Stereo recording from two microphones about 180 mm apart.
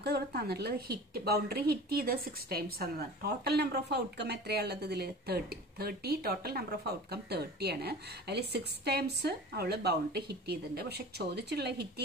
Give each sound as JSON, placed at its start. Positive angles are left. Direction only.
{"t": 0.0, "sound": "a woman's voice", "side_deg": -65}